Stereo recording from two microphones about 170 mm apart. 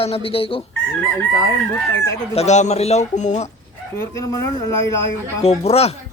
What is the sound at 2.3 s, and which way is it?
Speech, 40° left (ahead or behind).